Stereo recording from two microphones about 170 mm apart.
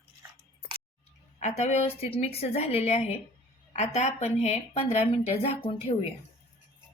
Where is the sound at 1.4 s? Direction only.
40° left (ahead or behind).